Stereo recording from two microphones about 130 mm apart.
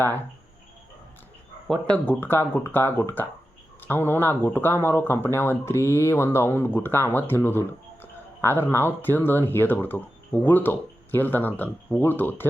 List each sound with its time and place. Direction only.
1.6 s speech: centre (ahead or behind)
2.0 s speech: 15° left (ahead or behind)